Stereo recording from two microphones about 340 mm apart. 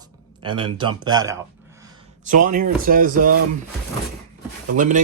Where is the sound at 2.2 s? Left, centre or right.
Right.